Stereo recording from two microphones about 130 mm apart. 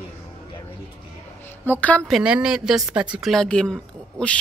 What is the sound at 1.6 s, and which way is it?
Speech, 15° left (ahead or behind).